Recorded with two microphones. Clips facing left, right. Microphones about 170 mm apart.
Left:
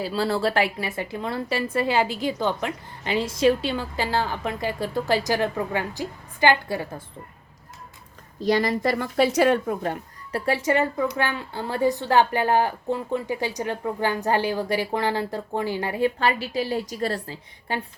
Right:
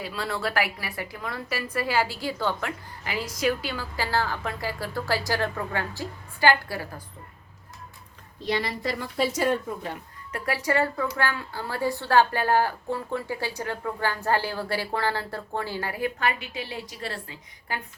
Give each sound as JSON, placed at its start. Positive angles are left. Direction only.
{"t": 0.0, "sound": "a woman's voice", "side_deg": 30}
{"t": 8.4, "sound": "a woman's voice", "side_deg": 45}
{"t": 10.3, "sound": "a woman's voice", "side_deg": 25}